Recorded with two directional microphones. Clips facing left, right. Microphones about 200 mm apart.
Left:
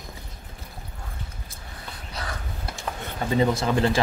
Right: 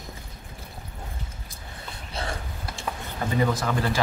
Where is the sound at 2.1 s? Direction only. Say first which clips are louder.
Right 3 dB; 25° right (ahead or behind).